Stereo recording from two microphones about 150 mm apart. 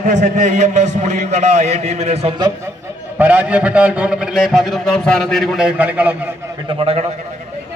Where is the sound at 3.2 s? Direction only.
10° right (ahead or behind).